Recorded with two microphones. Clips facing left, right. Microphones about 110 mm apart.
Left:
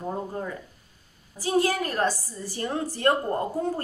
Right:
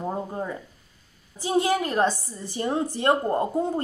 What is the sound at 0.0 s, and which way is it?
A woman's voice, 20° right (ahead or behind).